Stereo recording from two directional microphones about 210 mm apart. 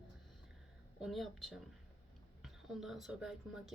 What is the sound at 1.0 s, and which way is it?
Speech, centre (ahead or behind).